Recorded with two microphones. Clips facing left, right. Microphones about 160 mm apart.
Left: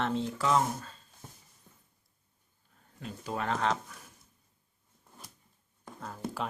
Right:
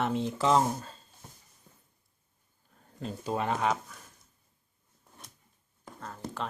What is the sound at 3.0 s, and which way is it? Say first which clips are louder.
Speech: right 4 dB; 25° right (ahead or behind).